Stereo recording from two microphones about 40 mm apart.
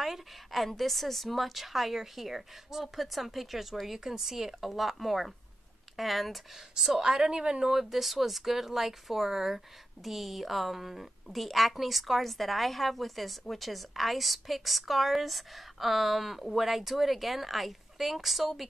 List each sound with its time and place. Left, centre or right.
0.0 s a woman's voice: centre
7.0 s a woman's voice: centre
7.7 s a woman's voice: centre